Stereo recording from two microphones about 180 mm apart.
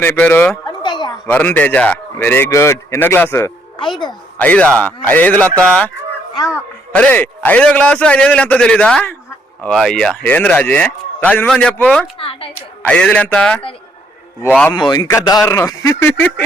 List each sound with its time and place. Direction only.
0.0 s a man's voice: 10° left (ahead or behind)
0.7 s a sound: 25° left (ahead or behind)
1.3 s a man's voice: 10° left (ahead or behind)
3.8 s speech: 25° left (ahead or behind)
4.4 s a man's voice: 10° left (ahead or behind)
6.3 s speech: 20° left (ahead or behind)
6.9 s a man's voice: 10° left (ahead or behind)
12.2 s a woman's voice: 30° left (ahead or behind)
12.9 s speech: 5° left (ahead or behind)
14.7 s a man's voice: 25° left (ahead or behind)